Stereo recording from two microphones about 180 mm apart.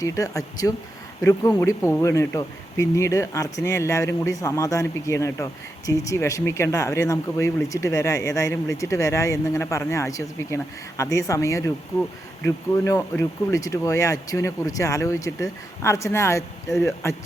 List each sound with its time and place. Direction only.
0.0 s speech: 20° left (ahead or behind)